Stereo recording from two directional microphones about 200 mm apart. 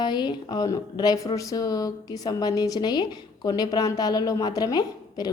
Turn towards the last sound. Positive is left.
turn(degrees=20)  # may be behind; listen again after turning